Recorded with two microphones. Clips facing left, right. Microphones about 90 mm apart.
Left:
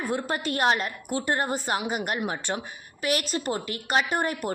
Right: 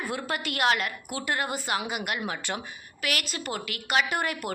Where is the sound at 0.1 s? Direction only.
30° left (ahead or behind).